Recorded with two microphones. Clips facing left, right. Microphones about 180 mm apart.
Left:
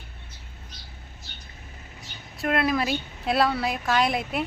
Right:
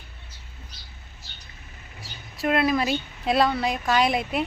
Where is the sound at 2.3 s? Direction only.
Centre (ahead or behind).